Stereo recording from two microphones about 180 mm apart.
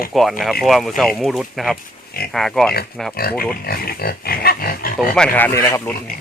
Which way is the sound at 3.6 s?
55° left (ahead or behind).